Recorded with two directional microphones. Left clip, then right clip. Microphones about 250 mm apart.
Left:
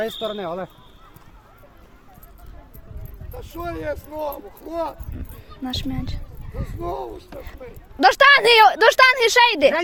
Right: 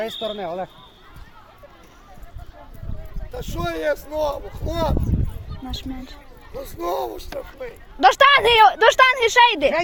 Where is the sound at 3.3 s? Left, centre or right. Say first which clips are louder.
Right 4 dB; right.